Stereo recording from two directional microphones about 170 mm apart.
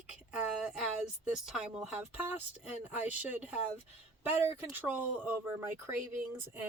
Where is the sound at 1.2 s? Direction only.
5° right (ahead or behind).